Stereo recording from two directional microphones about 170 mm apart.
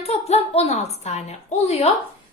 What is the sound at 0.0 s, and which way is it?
A woman's voice, 35° left (ahead or behind).